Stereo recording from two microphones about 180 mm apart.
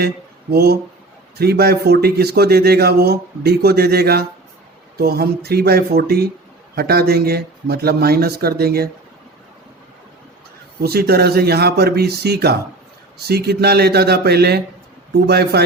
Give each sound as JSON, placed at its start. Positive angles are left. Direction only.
{"t": 0.5, "sound": "a man's voice", "side_deg": -60}
{"t": 10.8, "sound": "a man's voice", "side_deg": -60}